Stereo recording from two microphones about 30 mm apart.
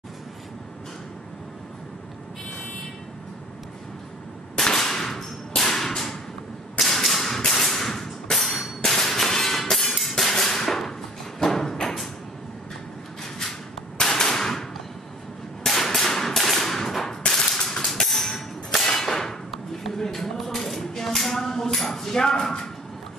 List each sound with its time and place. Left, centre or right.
4.6 s whip: centre
8.5 s music: centre
10.3 s a sound: centre
11.4 s thump: centre
13.2 s a sound: centre
17.3 s gunshot: centre
18.0 s cap gun: centre
18.9 s clang: centre
19.9 s a sound: centre